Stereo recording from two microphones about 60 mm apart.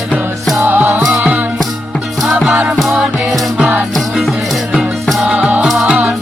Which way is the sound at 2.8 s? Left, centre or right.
Centre.